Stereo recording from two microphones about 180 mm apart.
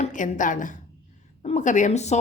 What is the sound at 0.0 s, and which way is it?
A woman's voice, 45° left (ahead or behind).